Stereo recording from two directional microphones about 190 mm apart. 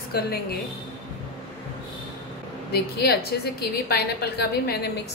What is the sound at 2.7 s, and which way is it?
A woman's voice, 55° left (ahead or behind).